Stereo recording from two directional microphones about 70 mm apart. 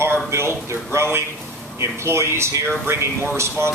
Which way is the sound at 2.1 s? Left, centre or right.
Right.